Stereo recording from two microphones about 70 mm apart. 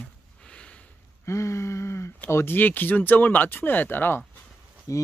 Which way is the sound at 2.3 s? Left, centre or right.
Left.